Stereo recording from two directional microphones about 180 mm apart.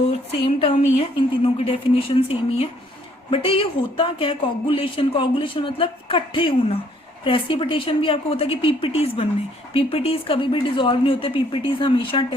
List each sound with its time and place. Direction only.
0.4 s speech: 30° left (ahead or behind)